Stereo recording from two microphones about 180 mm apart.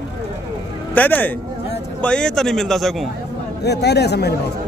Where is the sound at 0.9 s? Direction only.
10° left (ahead or behind).